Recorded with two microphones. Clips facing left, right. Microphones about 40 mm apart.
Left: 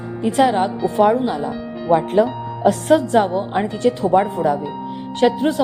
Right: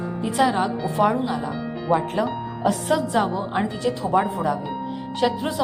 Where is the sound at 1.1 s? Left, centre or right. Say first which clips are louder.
Left 5 dB; left.